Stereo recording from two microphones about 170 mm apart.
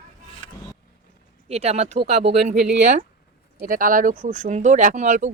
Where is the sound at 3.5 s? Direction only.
55° right (ahead or behind).